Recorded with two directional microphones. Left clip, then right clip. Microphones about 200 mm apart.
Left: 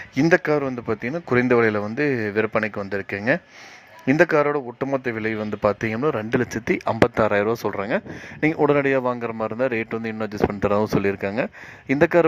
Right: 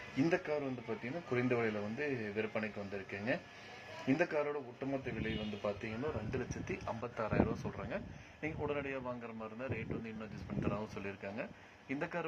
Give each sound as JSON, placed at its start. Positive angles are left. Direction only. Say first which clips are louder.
{"t": 0.2, "sound": "speech", "louder": "left 17 dB", "side_deg": 45}